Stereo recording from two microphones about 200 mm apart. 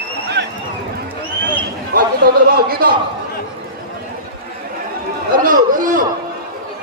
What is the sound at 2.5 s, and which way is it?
Speech, 50° right (ahead or behind).